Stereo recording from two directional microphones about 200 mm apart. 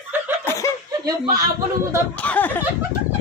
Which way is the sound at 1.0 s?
20° right (ahead or behind).